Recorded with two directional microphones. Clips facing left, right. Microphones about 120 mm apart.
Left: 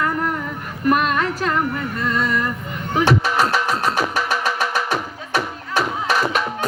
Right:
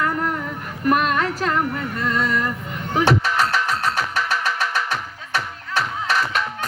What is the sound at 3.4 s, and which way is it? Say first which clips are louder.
Music: left 2 dB; 15° left (ahead or behind).